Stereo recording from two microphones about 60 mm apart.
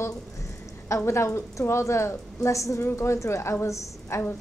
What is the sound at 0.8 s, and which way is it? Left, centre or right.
A woman's voice, left.